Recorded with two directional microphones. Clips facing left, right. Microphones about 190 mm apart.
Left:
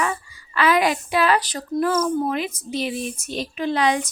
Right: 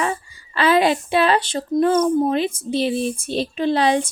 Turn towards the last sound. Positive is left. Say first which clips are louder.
# right 3 dB
turn(degrees=-30)  # may be behind; listen again after turning